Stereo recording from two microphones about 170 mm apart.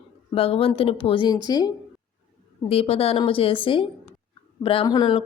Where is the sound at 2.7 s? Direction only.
35° left (ahead or behind).